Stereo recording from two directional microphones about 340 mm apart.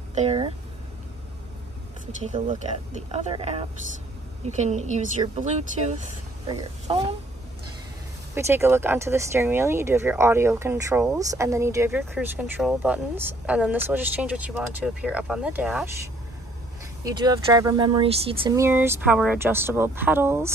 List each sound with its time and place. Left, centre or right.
0.1 s speech: centre
2.1 s speech: centre
8.4 s speech: centre
17.0 s speech: centre